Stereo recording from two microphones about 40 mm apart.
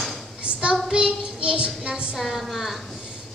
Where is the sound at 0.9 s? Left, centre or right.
Right.